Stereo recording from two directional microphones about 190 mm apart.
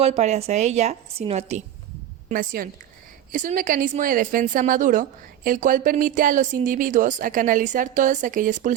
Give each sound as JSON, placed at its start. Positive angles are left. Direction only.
{"t": 0.0, "sound": "a woman's voice", "side_deg": -35}
{"t": 2.3, "sound": "a woman's voice", "side_deg": -45}